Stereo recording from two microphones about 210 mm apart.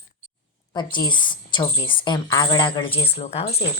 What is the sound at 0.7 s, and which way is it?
Speech, 20° left (ahead or behind).